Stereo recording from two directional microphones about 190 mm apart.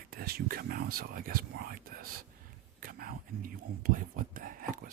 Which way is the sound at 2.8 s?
50° right (ahead or behind).